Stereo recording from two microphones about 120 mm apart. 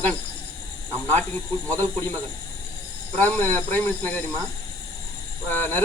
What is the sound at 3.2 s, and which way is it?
Speech, 15° left (ahead or behind).